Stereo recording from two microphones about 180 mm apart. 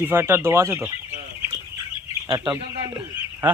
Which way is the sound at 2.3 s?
25° right (ahead or behind).